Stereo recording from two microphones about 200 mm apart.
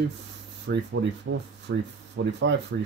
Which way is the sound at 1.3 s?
90° right.